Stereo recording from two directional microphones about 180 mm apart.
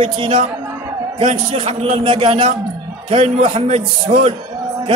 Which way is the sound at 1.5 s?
30° right (ahead or behind).